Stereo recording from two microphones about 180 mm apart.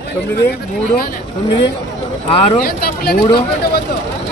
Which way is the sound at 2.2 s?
30° left (ahead or behind).